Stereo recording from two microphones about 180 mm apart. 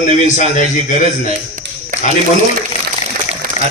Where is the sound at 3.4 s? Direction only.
55° right (ahead or behind).